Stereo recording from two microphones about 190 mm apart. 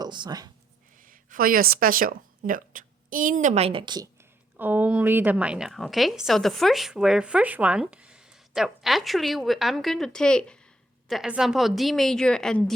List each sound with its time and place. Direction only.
0.0 s speech: 20° right (ahead or behind)
0.9 s a woman's voice: 45° right (ahead or behind); by 12.7 s 5° left (ahead or behind)